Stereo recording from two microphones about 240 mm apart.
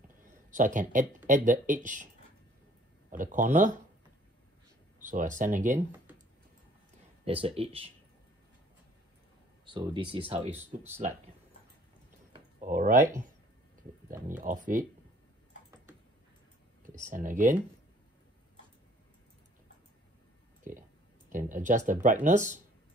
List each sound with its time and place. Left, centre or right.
0.2 s a sound: right
1.2 s speech: right
3.1 s speech: right
5.0 s speech: right
5.8 s speech: centre
7.2 s speech: right
9.8 s speech: right
10.5 s speech: centre
12.3 s a sound: right
14.4 s speech: right
16.8 s speech: right
20.7 s speech: right